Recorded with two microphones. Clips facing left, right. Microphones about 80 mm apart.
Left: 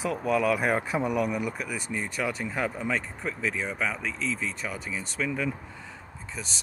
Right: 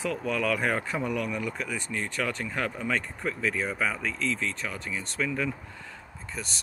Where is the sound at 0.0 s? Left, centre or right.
Centre.